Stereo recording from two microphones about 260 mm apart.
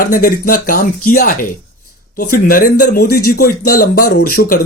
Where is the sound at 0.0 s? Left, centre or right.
Left.